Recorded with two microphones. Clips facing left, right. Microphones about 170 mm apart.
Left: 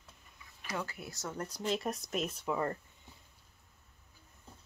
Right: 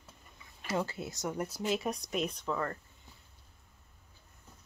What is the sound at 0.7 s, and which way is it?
Speech, 25° right (ahead or behind).